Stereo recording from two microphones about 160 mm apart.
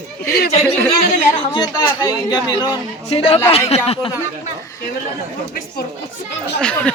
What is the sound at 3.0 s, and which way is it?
A man's voice, 35° left (ahead or behind).